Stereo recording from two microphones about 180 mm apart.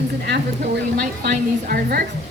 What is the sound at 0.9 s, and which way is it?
A woman's voice, 55° right (ahead or behind).